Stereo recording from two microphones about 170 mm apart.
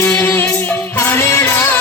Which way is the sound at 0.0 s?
15° left (ahead or behind).